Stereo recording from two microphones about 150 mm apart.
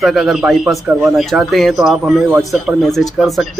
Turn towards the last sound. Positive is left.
turn(degrees=0)  # may be behind; listen again after turning